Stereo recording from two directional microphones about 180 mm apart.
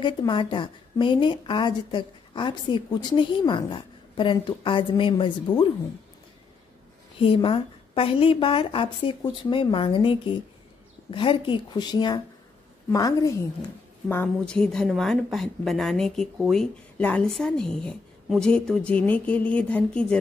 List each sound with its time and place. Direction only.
0.0 s a woman's voice: 25° left (ahead or behind)
7.2 s a woman's voice: 30° left (ahead or behind)
14.0 s a woman's voice: 10° left (ahead or behind)